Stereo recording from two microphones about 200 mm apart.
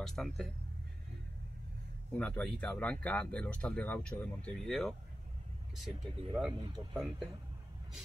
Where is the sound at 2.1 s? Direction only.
5° left (ahead or behind).